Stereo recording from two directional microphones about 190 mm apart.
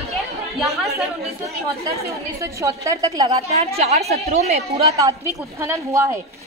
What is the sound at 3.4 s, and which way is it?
Speech, 35° right (ahead or behind).